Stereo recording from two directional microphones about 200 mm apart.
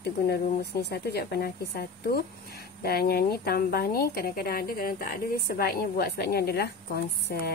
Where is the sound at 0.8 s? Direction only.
50° left (ahead or behind).